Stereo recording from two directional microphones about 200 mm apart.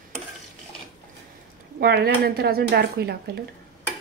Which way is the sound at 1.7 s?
55° right (ahead or behind).